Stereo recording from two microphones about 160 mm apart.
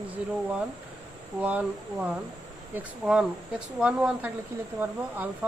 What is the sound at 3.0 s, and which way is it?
Speech, 5° right (ahead or behind).